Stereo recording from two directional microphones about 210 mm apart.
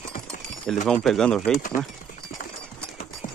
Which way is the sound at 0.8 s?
5° left (ahead or behind).